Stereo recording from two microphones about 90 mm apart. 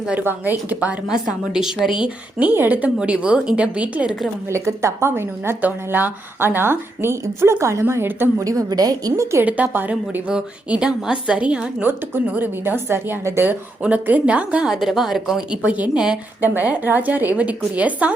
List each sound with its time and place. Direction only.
0.0 s a woman's voice: 15° right (ahead or behind)
4.4 s speech: 30° right (ahead or behind)
8.4 s a woman's voice: 45° right (ahead or behind)
9.4 s a woman's voice: 20° right (ahead or behind)